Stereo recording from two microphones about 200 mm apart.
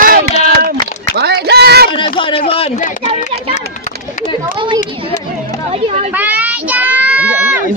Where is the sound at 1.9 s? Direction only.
25° left (ahead or behind).